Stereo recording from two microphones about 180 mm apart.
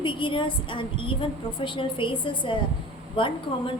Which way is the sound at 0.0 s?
25° left (ahead or behind).